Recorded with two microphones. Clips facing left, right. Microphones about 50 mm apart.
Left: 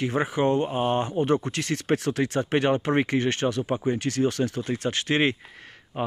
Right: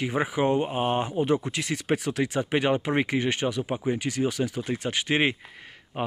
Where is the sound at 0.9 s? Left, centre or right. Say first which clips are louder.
Left 1 dB; centre.